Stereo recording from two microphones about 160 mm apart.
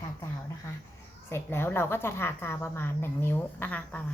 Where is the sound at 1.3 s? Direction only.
15° left (ahead or behind).